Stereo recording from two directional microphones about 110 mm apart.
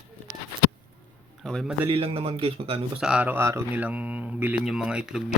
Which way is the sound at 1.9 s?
60° right (ahead or behind).